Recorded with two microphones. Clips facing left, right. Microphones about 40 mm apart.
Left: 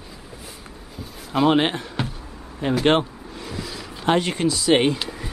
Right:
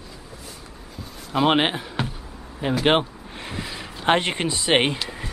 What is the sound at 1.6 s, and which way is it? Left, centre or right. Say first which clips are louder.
Speech: even; centre.